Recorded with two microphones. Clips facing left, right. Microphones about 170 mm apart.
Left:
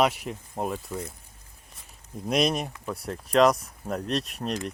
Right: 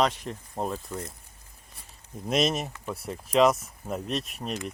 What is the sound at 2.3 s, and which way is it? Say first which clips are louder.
Speech: left 1 dB; centre (ahead or behind).